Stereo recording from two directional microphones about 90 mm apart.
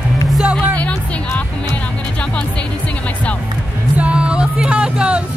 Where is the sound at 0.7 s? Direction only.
15° left (ahead or behind).